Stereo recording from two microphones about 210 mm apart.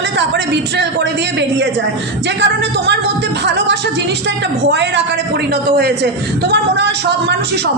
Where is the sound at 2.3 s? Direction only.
55° right (ahead or behind).